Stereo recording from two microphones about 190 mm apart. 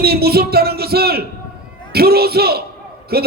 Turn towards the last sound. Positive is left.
turn(degrees=-55)  # may be behind; listen again after turning